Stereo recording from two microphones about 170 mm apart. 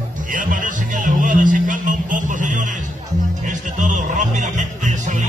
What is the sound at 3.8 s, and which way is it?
Music, 45° right (ahead or behind).